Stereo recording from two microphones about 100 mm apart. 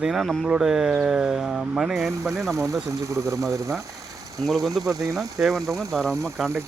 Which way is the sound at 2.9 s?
30° right (ahead or behind).